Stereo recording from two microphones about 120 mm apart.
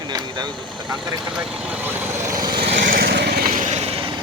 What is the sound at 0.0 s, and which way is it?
Vehicle, 35° right (ahead or behind).